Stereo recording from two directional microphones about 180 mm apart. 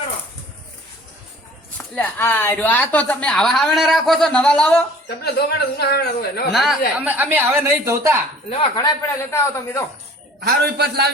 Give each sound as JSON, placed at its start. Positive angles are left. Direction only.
{"t": 1.8, "sound": "speech", "side_deg": 10}
{"t": 5.0, "sound": "speech", "side_deg": 65}
{"t": 6.5, "sound": "a woman's voice", "side_deg": 0}
{"t": 8.4, "sound": "a man's voice", "side_deg": 25}
{"t": 10.4, "sound": "a man's voice", "side_deg": -60}